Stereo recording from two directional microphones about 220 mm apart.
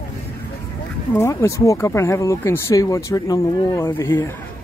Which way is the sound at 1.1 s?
10° left (ahead or behind).